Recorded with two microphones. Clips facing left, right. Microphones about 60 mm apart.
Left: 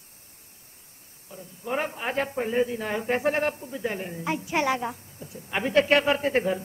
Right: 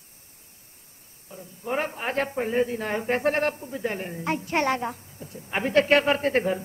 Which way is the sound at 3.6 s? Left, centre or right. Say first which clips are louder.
Right 1 dB; right.